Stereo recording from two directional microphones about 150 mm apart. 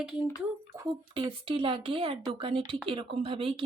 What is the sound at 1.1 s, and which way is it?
Speech, 35° right (ahead or behind).